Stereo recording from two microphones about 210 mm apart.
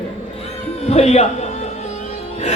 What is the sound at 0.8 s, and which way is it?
Speech, 30° left (ahead or behind).